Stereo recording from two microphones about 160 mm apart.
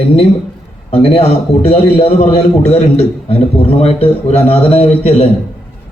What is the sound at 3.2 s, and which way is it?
A man's voice, 40° left (ahead or behind).